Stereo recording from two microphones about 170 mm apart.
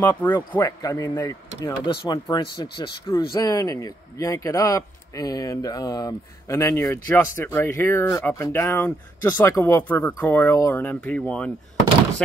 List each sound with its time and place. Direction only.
0.0 s speech: 10° left (ahead or behind)